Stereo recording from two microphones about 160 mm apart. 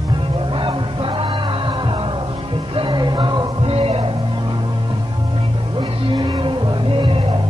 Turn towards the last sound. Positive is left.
turn(degrees=-35)  # may be behind; listen again after turning